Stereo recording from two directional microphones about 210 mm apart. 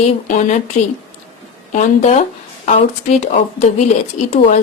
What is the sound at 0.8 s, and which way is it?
Speech, 35° left (ahead or behind).